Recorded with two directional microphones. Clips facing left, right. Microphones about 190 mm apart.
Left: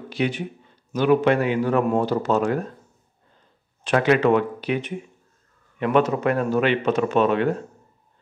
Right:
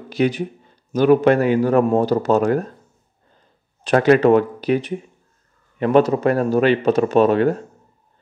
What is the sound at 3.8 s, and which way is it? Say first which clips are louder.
A man's voice: right 5 dB; 40° right (ahead or behind).